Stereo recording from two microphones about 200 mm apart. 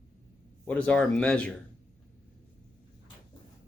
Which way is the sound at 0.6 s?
5° left (ahead or behind).